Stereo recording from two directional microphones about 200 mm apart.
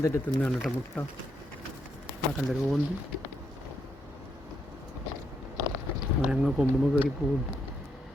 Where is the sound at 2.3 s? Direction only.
Centre (ahead or behind).